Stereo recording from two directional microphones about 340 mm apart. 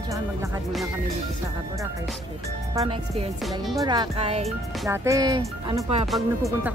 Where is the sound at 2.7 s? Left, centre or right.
Centre.